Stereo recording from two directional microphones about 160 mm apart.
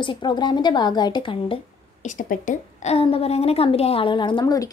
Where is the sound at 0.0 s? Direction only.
30° left (ahead or behind).